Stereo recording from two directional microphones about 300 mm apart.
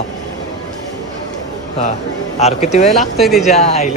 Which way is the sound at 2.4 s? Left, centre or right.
Left.